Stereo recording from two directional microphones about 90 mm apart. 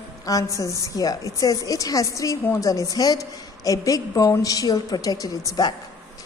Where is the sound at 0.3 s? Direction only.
40° left (ahead or behind).